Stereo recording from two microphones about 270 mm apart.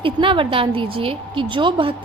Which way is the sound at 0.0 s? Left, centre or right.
Centre.